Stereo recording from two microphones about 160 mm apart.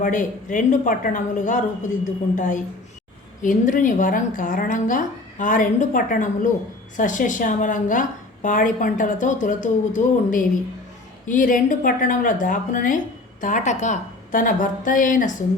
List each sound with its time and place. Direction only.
0.0 s a woman's voice: 55° left (ahead or behind)